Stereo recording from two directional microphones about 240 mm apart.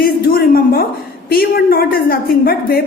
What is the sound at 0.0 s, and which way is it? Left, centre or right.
A woman's voice, left.